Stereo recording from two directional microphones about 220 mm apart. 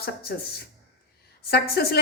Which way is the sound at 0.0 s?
45° left (ahead or behind).